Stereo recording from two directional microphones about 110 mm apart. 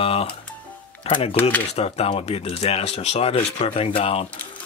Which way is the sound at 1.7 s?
70° left (ahead or behind).